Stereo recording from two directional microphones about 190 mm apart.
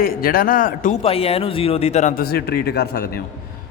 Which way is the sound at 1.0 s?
30° left (ahead or behind).